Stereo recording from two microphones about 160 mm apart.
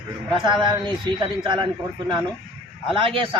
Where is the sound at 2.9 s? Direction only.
35° right (ahead or behind).